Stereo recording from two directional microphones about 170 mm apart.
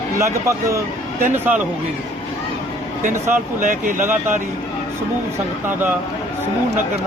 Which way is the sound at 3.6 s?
50° right (ahead or behind).